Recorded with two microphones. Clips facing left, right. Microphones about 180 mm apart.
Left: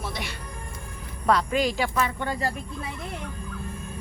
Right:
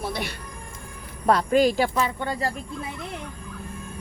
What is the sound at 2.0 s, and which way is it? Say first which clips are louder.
Speech: right 1 dB; 15° right (ahead or behind).